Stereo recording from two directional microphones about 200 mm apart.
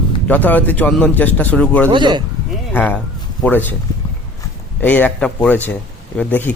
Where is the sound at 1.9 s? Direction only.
25° right (ahead or behind).